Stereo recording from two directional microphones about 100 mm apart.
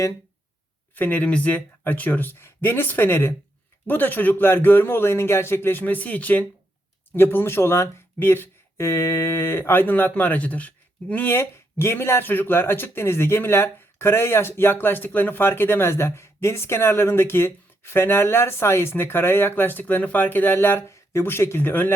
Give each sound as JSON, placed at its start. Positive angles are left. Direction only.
{"t": 0.9, "sound": "speech", "side_deg": 20}